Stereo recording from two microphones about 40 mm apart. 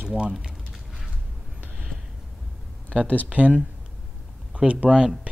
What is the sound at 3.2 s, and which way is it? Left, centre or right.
Speech, right.